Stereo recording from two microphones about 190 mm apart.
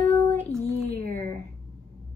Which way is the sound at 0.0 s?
15° left (ahead or behind).